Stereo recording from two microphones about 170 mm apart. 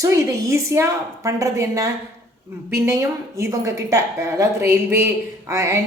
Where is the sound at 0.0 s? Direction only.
20° right (ahead or behind).